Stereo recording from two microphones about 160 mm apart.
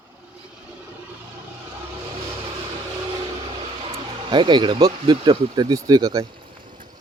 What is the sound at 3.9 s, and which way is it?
Speech, 30° right (ahead or behind).